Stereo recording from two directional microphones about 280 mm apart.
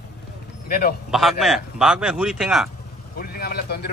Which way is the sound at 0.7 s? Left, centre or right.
Left.